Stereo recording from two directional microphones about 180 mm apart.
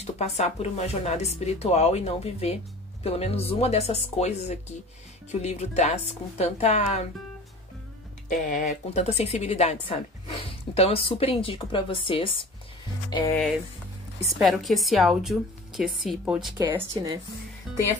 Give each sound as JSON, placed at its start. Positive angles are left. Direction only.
{"t": 0.0, "sound": "a woman's voice", "side_deg": 35}
{"t": 8.3, "sound": "a woman's voice", "side_deg": 45}
{"t": 14.4, "sound": "a woman's voice", "side_deg": 0}
{"t": 16.5, "sound": "speech", "side_deg": -20}